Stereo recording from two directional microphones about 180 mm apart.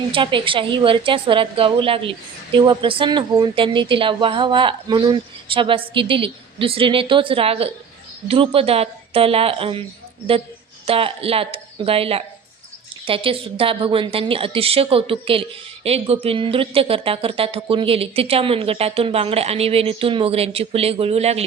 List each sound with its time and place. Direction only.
0.1 s a woman's voice: 30° right (ahead or behind)
10.8 s a woman's voice: 30° right (ahead or behind)